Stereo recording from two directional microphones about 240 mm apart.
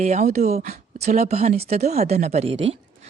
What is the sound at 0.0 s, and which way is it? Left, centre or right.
A woman's voice, right.